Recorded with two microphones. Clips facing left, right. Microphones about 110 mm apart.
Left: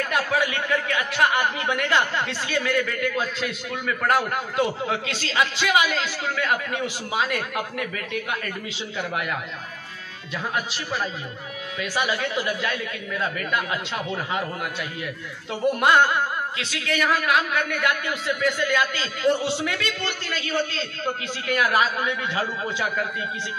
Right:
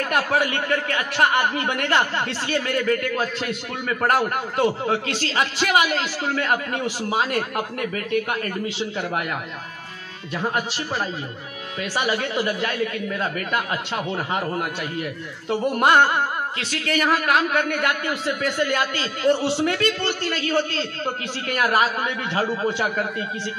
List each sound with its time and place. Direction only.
0.0 s speech: 50° right (ahead or behind)
10.5 s speech: 45° right (ahead or behind)
15.8 s music: 40° right (ahead or behind)
16.5 s speech: 50° right (ahead or behind)